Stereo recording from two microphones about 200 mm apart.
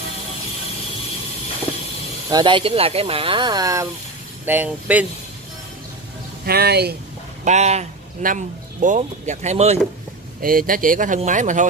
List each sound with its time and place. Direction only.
2.3 s speech: 25° right (ahead or behind); by 5.0 s 10° right (ahead or behind)
6.4 s speech: 50° right (ahead or behind)
7.4 s speech: 35° right (ahead or behind)
10.4 s speech: 45° right (ahead or behind)